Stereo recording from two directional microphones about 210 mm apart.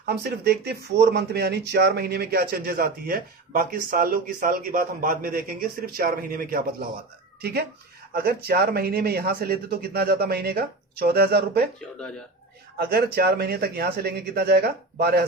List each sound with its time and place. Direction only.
0.0 s speech: 50° right (ahead or behind)
8.1 s speech: 50° right (ahead or behind)
12.8 s speech: 50° right (ahead or behind)